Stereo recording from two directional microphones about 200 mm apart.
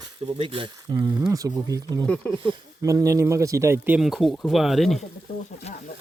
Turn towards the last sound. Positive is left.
turn(degrees=30)  # may be behind; listen again after turning